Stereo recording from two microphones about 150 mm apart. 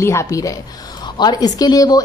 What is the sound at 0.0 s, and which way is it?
A woman's voice, 20° left (ahead or behind).